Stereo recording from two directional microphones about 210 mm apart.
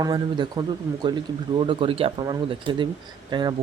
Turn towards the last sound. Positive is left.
turn(degrees=-20)  # may be behind; listen again after turning